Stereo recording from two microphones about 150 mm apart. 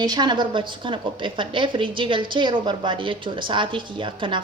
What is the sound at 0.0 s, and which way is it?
A woman's voice, 30° right (ahead or behind).